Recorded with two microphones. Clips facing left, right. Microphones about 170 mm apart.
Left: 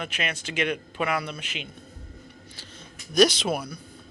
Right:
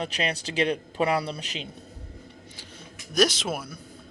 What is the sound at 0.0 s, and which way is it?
A man's voice, 35° right (ahead or behind).